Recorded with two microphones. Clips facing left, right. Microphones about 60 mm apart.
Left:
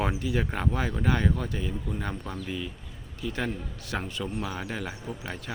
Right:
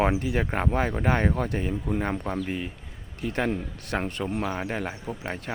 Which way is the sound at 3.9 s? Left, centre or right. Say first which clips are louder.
Right 4 dB; right.